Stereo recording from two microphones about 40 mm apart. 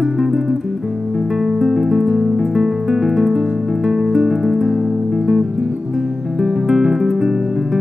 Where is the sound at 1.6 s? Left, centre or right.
Centre.